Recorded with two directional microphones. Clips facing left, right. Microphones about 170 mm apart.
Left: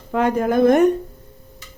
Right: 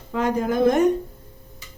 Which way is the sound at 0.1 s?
60° left (ahead or behind).